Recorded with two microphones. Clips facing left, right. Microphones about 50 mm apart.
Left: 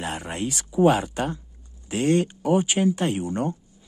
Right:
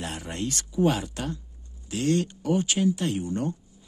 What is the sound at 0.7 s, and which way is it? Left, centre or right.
Speech, left.